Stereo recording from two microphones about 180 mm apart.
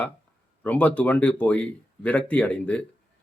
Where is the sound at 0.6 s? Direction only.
10° left (ahead or behind).